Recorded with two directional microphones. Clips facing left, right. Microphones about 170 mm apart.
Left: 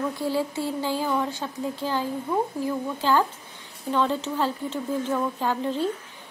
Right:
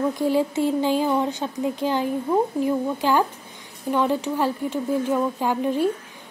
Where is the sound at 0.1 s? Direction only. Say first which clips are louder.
Right 5 dB; 20° right (ahead or behind).